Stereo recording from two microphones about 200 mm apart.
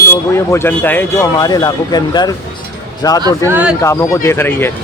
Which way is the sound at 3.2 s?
10° right (ahead or behind).